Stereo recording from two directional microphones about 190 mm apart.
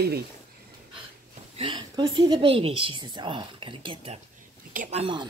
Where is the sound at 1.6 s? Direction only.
25° right (ahead or behind).